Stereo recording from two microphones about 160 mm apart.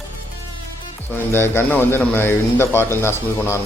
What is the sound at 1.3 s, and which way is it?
Speech, 15° left (ahead or behind).